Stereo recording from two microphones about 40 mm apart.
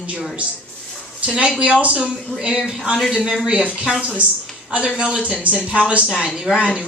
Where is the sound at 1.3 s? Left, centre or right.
Right.